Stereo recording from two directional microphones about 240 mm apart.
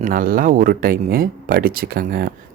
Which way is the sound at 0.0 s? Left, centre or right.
Right.